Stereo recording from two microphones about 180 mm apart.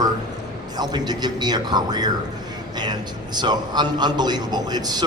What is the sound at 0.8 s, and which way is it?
A man's voice, 25° right (ahead or behind).